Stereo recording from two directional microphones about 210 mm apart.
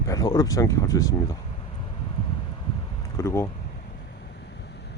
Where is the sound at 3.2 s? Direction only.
15° left (ahead or behind).